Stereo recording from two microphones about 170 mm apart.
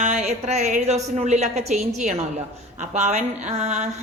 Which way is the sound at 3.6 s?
40° right (ahead or behind).